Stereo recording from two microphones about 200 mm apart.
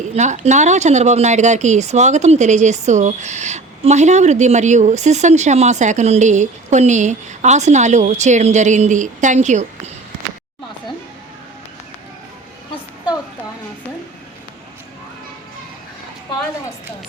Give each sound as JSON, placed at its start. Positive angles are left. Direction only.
{"t": 0.1, "sound": "speech", "side_deg": -35}